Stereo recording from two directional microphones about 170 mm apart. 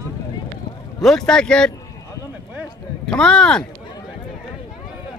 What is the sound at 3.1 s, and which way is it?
Speech, 5° left (ahead or behind).